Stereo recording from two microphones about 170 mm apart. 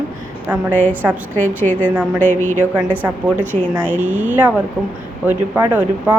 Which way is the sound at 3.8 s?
10° right (ahead or behind).